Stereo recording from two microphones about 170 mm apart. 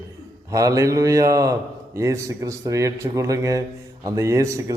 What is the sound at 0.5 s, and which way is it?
Speech, 20° right (ahead or behind).